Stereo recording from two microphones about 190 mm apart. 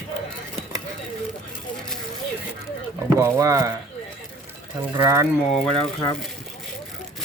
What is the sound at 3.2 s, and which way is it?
Speech, 15° right (ahead or behind).